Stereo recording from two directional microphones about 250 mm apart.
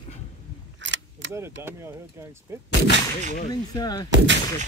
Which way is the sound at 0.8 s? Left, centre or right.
Right.